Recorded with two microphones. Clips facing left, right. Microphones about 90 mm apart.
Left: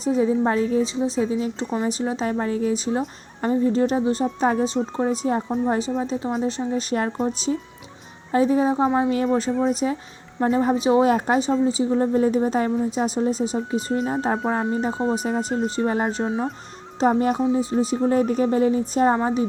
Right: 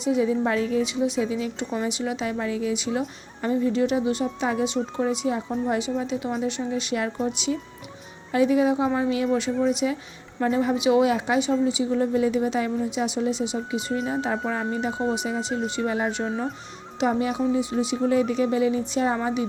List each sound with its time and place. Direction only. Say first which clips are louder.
0.0 s a woman's voice: left 2 dB; 35° left (ahead or behind)